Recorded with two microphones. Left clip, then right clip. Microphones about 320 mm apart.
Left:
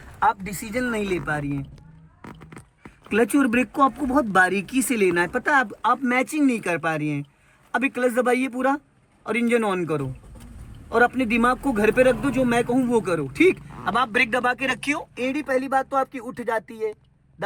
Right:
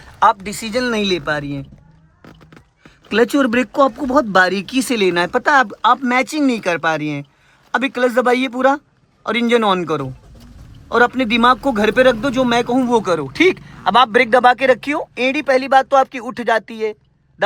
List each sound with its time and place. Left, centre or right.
0.2 s speech: centre
3.1 s speech: centre